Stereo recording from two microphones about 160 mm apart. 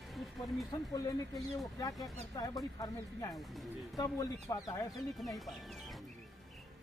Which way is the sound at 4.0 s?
20° left (ahead or behind).